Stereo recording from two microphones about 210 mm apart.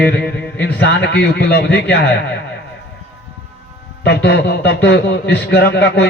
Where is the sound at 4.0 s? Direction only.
55° left (ahead or behind).